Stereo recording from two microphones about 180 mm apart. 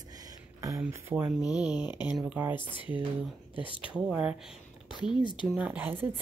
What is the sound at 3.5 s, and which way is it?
Speech, 30° left (ahead or behind).